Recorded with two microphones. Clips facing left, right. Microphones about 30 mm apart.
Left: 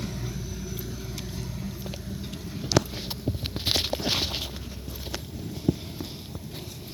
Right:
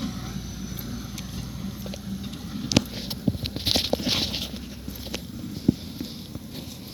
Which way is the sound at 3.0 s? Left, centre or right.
Right.